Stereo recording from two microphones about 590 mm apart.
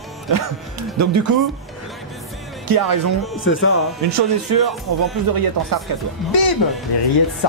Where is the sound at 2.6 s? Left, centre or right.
Right.